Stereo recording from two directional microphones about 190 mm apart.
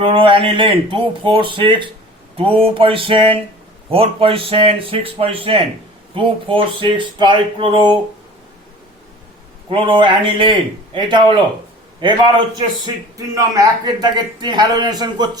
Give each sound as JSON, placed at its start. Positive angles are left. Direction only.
{"t": 0.0, "sound": "a man's voice", "side_deg": -25}
{"t": 9.6, "sound": "a man's voice", "side_deg": -25}